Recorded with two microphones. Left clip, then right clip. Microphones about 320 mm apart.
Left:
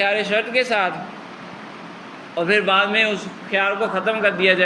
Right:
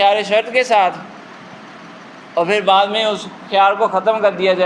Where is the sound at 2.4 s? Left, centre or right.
Centre.